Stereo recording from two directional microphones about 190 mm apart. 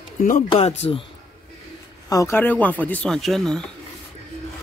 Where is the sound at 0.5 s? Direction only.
35° left (ahead or behind).